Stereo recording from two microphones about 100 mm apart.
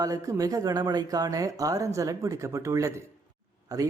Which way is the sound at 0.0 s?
35° right (ahead or behind).